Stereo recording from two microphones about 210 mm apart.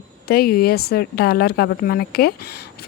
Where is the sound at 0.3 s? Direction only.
45° left (ahead or behind).